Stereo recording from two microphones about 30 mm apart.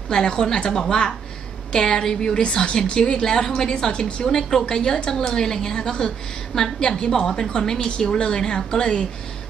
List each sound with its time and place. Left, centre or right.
0.1 s a woman's voice: left